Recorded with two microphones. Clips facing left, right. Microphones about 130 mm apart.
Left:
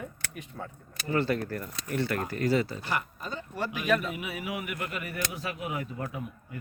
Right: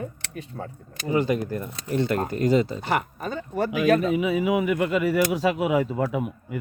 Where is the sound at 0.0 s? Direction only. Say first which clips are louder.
Right 6 dB; 35° right (ahead or behind).